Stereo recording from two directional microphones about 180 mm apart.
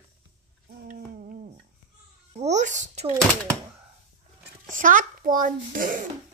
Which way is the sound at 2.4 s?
40° right (ahead or behind).